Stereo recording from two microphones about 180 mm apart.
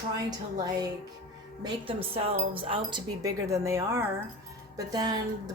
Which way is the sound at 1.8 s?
30° right (ahead or behind).